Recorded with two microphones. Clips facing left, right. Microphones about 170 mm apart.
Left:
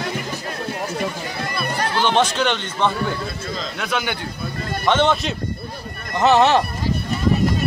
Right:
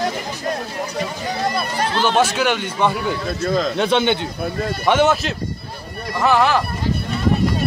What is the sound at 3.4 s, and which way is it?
Speech, 55° right (ahead or behind).